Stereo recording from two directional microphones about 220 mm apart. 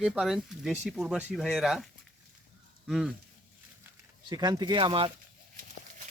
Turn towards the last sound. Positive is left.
turn(degrees=-25)  # may be behind; listen again after turning